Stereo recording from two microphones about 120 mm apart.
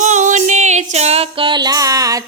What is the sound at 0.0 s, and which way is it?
Music, 90° right.